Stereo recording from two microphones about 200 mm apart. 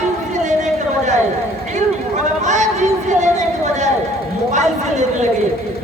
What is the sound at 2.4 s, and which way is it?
Chatter, 35° right (ahead or behind).